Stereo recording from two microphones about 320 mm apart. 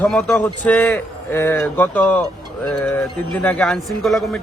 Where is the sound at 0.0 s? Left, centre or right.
Centre.